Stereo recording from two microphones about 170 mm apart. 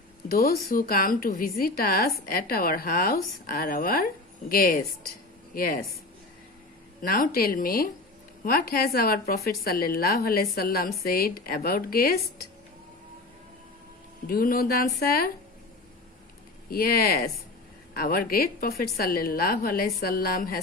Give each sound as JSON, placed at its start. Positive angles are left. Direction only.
{"t": 0.3, "sound": "a woman's voice", "side_deg": 55}
{"t": 7.0, "sound": "a woman's voice", "side_deg": 60}
{"t": 14.3, "sound": "a woman's voice", "side_deg": 60}
{"t": 16.6, "sound": "a woman's voice", "side_deg": 60}